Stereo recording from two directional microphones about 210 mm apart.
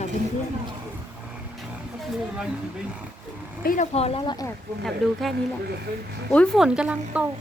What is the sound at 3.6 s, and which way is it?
Speech, 45° left (ahead or behind).